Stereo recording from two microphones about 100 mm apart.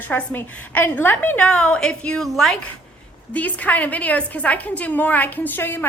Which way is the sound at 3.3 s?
15° left (ahead or behind).